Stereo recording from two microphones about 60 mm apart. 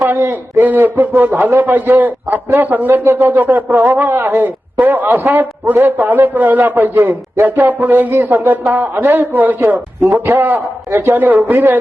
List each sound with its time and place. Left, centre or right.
0.0 s a man's voice: right